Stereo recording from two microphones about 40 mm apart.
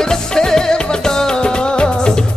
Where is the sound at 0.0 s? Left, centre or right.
Centre.